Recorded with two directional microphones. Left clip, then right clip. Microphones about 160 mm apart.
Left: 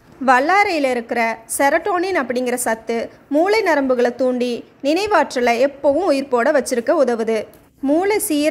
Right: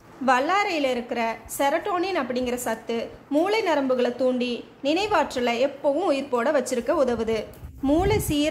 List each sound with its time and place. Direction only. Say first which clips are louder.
0.2 s a woman's voice: left 7 dB; 30° left (ahead or behind)